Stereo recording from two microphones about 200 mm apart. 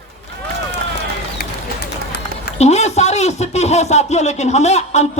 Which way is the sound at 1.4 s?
55° left (ahead or behind).